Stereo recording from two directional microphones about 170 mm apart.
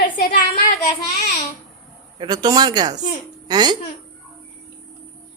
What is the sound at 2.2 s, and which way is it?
Speech, 25° right (ahead or behind).